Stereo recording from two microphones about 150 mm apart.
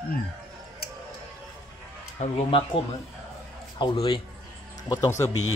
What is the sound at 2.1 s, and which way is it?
Speech, 45° left (ahead or behind).